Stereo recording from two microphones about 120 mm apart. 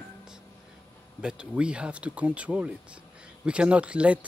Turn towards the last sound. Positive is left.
turn(degrees=-10)  # may be behind; listen again after turning